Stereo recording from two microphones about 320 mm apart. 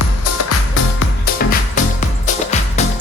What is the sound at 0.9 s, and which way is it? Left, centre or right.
Music, left.